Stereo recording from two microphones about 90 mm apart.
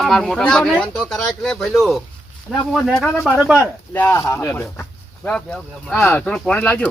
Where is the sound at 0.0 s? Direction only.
5° left (ahead or behind).